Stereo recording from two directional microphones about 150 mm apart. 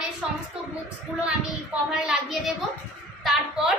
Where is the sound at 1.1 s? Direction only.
10° right (ahead or behind).